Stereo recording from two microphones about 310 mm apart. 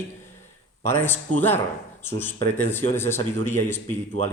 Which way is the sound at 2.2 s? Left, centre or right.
Centre.